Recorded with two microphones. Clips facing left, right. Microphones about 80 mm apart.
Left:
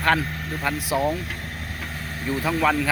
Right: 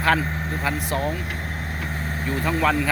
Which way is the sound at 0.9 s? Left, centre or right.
Centre.